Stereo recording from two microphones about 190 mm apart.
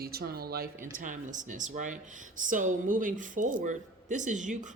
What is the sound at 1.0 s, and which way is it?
Speech, 45° right (ahead or behind).